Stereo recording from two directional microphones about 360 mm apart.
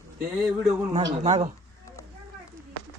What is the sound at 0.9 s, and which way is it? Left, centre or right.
Speech, centre.